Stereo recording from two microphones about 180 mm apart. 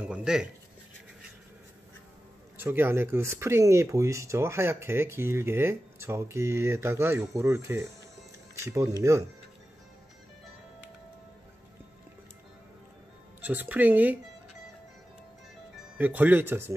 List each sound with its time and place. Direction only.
0.0 s speech: 5° right (ahead or behind)
2.5 s speech: 10° right (ahead or behind)
13.4 s speech: 10° right (ahead or behind)
16.0 s speech: 10° right (ahead or behind)